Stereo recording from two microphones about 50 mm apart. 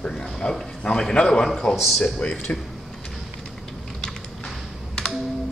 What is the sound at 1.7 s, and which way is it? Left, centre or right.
Speech, centre.